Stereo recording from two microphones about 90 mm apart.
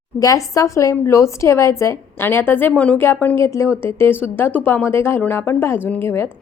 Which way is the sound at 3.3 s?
30° left (ahead or behind).